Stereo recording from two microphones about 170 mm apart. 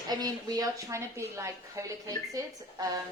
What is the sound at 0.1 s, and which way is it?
A woman's voice, 25° right (ahead or behind).